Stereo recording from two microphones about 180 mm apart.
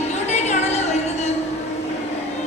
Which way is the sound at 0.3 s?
40° left (ahead or behind).